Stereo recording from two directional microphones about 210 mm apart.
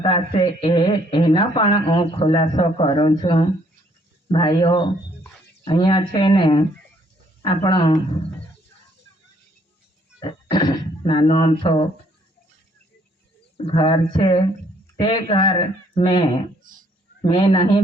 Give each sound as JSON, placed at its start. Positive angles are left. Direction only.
{"t": 0.0, "sound": "a man's voice", "side_deg": 25}
{"t": 10.2, "sound": "speech", "side_deg": 20}
{"t": 13.7, "sound": "a man's voice", "side_deg": 25}